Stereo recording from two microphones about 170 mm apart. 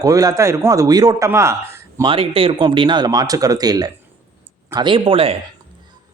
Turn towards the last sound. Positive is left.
turn(degrees=-35)  # may be behind; listen again after turning